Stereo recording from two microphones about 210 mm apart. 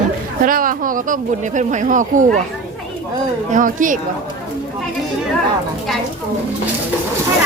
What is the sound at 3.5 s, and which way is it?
Speech, 40° right (ahead or behind).